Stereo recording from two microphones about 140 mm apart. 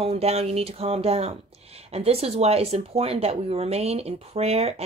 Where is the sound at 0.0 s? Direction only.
45° right (ahead or behind).